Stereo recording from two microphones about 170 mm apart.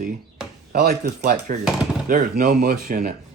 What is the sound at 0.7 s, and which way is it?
Speech, 65° right (ahead or behind).